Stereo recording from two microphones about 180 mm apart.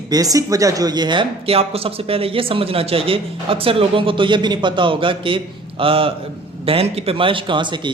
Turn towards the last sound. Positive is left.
turn(degrees=-25)  # may be behind; listen again after turning